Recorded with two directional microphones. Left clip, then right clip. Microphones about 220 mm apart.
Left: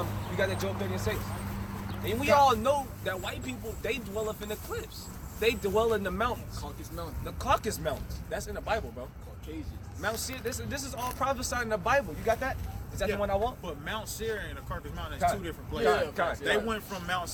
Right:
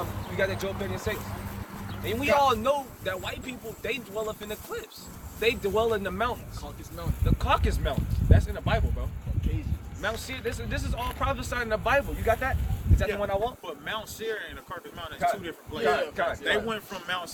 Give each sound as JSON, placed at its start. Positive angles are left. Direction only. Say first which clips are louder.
{"t": 0.0, "sound": "speech", "louder": "right 2 dB", "side_deg": 15}
{"t": 10.0, "sound": "speech", "louder": "right 2 dB", "side_deg": 10}
{"t": 15.8, "sound": "speech", "louder": "right 1 dB", "side_deg": 25}